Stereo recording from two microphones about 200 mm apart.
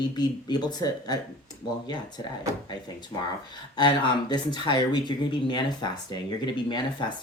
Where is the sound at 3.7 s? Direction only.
20° left (ahead or behind).